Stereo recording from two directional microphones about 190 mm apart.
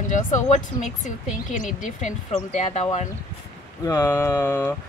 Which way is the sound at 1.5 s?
40° left (ahead or behind).